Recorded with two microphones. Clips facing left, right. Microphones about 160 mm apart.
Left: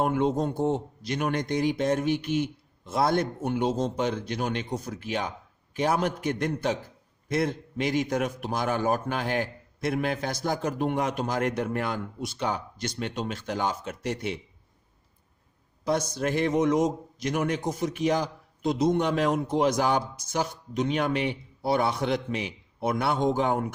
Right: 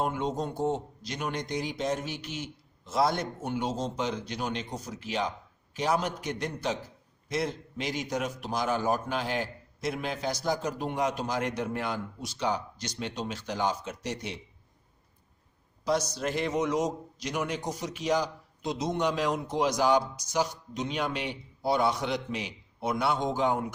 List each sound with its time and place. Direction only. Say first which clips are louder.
0.0 s a man's voice: left 5 dB; 55° left (ahead or behind)
15.8 s a man's voice: left 2 dB; 55° left (ahead or behind)